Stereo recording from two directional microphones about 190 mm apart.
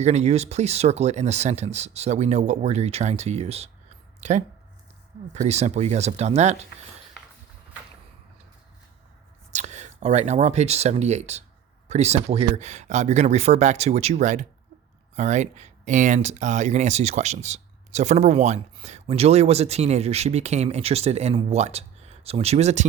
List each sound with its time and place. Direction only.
0.0 s speech: 35° right (ahead or behind)
9.5 s speech: 35° right (ahead or behind)